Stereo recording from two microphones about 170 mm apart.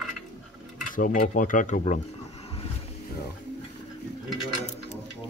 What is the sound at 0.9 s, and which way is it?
Speech, 50° left (ahead or behind).